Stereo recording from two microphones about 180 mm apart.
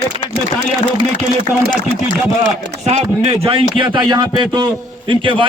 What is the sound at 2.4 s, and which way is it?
Speech, 35° right (ahead or behind).